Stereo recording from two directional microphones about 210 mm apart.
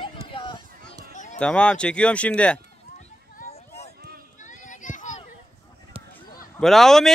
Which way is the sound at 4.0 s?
45° right (ahead or behind).